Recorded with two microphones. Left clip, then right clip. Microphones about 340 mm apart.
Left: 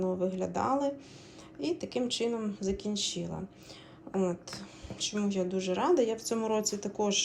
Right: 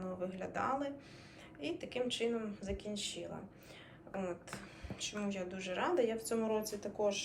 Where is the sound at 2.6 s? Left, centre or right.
Centre.